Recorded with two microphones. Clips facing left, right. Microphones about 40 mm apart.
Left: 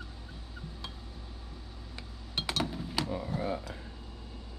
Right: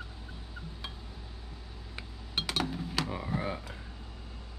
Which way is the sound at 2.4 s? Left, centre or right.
Right.